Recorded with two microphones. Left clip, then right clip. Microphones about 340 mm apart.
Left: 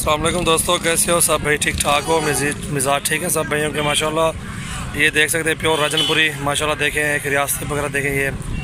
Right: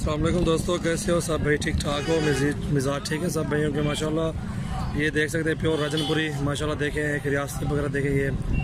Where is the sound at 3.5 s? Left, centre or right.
Left.